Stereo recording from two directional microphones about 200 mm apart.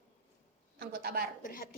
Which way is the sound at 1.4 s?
45° left (ahead or behind).